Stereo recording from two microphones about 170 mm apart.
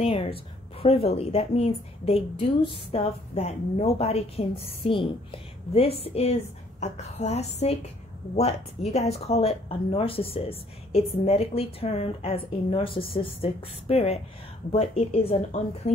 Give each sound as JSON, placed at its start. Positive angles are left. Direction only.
{"t": 0.0, "sound": "a woman's voice", "side_deg": 35}